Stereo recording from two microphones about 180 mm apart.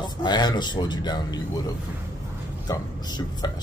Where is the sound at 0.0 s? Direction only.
25° left (ahead or behind).